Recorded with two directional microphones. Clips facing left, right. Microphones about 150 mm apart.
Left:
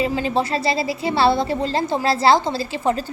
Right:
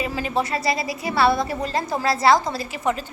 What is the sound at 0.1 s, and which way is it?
A woman's voice, 30° left (ahead or behind).